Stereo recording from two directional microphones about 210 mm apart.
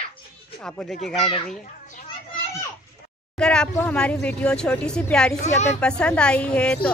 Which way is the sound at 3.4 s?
5° left (ahead or behind).